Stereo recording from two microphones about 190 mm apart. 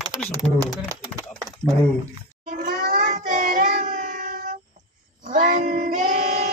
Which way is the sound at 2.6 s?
40° right (ahead or behind).